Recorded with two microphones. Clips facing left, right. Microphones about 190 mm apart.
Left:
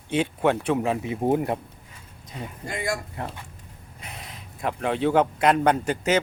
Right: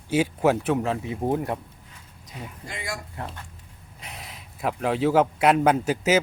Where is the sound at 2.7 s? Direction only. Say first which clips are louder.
Left 7 dB; 50° left (ahead or behind).